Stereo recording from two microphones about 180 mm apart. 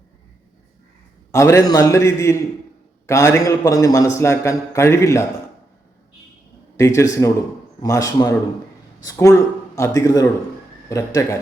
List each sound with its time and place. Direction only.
1.3 s a man's voice: 15° left (ahead or behind)
6.7 s a man's voice: 15° left (ahead or behind)